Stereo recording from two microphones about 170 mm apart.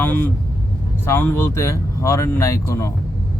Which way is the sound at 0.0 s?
10° left (ahead or behind).